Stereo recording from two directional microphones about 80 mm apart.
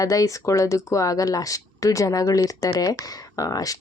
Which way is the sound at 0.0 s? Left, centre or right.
Left.